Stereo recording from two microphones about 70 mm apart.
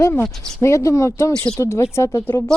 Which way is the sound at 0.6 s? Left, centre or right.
Left.